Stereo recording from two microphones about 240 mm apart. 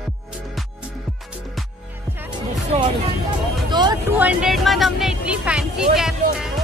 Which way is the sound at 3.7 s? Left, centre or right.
Centre.